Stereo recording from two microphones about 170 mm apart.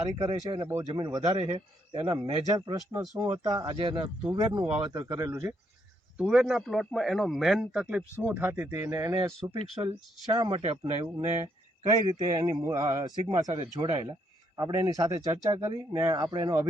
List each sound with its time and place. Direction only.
0.3 s speech: 25° right (ahead or behind)
6.1 s a man's voice: 5° right (ahead or behind)
9.6 s speech: 35° right (ahead or behind)
10.2 s speech: 25° right (ahead or behind)
10.6 s speech: 35° right (ahead or behind)
11.0 s speech: 10° right (ahead or behind)
13.6 s speech: 35° right (ahead or behind)
14.5 s speech: 20° right (ahead or behind)